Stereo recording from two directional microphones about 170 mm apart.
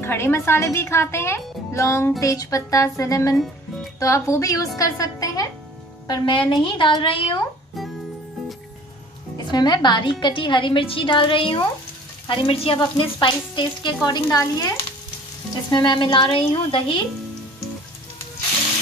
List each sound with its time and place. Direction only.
0.0 s a woman's voice: 15° left (ahead or behind); by 7.3 s 30° left (ahead or behind)
9.5 s speech: 25° left (ahead or behind)
15.7 s speech: 25° left (ahead or behind)